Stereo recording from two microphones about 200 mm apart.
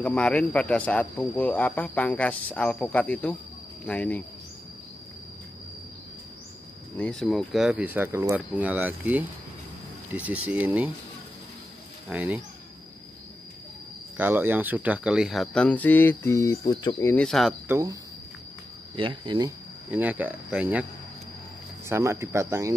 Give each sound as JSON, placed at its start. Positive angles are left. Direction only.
{"t": 0.0, "sound": "speech", "side_deg": 5}
{"t": 7.0, "sound": "speech", "side_deg": 5}
{"t": 12.1, "sound": "speech", "side_deg": -5}
{"t": 14.1, "sound": "speech", "side_deg": -10}
{"t": 17.6, "sound": "speech", "side_deg": -15}
{"t": 18.9, "sound": "speech", "side_deg": -25}
{"t": 19.9, "sound": "speech", "side_deg": -10}
{"t": 21.8, "sound": "speech", "side_deg": -10}